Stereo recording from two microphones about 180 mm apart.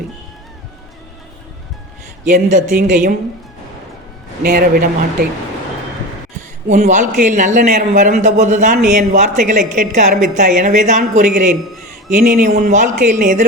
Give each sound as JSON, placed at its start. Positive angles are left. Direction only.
{"t": 2.2, "sound": "a woman's voice", "side_deg": -45}
{"t": 4.4, "sound": "a man's voice", "side_deg": -55}
{"t": 6.7, "sound": "a man's voice", "side_deg": -40}